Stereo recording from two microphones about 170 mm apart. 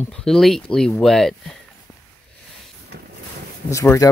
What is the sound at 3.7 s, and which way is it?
Speech, 20° left (ahead or behind).